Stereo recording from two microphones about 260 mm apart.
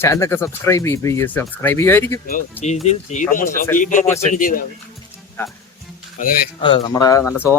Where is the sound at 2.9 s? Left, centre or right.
Left.